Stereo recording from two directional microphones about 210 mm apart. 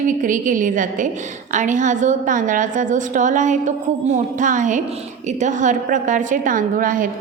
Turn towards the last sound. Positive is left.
turn(degrees=-40)  # may be behind; listen again after turning